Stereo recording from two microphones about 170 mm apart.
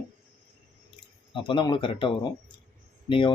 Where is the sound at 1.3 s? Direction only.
30° left (ahead or behind).